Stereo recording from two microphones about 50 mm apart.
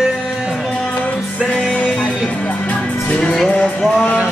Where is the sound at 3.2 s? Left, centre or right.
Centre.